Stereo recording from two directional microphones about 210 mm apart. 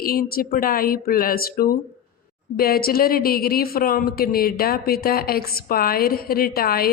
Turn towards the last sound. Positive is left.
turn(degrees=45)  # may be behind; listen again after turning